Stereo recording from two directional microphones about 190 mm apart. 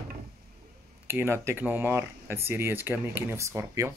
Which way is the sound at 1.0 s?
10° right (ahead or behind).